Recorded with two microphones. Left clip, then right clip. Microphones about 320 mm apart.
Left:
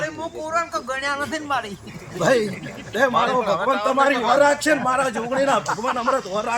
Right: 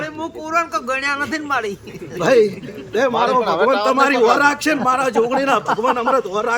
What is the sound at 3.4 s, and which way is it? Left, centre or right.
Speech, right.